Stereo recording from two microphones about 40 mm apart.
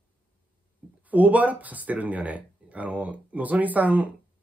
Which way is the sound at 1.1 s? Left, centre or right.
Right.